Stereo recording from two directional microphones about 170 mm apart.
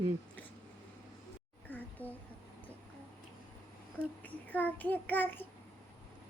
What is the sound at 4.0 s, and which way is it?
Child singing, 10° left (ahead or behind).